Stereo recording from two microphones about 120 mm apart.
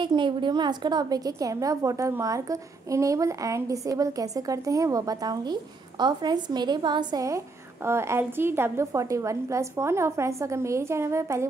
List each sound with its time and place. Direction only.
0.0 s a woman's voice: 40° right (ahead or behind); by 11.4 s 25° right (ahead or behind)